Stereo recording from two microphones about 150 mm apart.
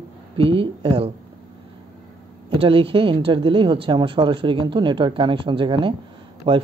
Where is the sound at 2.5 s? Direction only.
35° right (ahead or behind).